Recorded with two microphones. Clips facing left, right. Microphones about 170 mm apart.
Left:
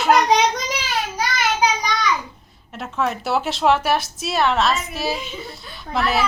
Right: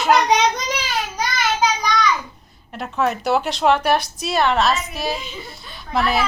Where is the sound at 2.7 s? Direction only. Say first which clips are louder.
Right 2 dB; centre (ahead or behind).